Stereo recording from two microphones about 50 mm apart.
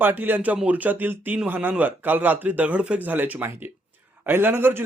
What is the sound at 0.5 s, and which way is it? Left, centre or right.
Speech, right.